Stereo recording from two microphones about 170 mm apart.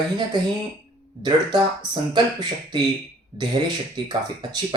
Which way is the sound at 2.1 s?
25° right (ahead or behind).